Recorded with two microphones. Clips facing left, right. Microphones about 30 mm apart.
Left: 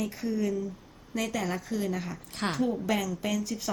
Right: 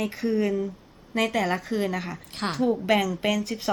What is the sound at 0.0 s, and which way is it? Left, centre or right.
A woman's voice, right.